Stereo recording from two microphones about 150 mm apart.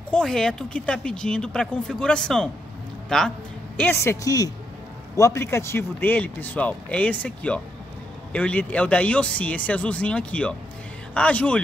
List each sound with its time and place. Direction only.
0.1 s a man's voice: 5° left (ahead or behind)